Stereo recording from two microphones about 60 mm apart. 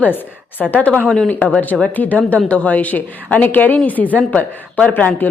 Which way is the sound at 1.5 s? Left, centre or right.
Left.